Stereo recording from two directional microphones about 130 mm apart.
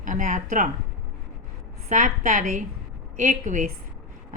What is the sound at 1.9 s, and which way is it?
A woman's voice, 75° right (ahead or behind).